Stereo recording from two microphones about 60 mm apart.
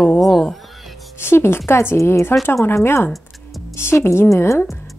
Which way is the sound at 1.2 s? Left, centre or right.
Left.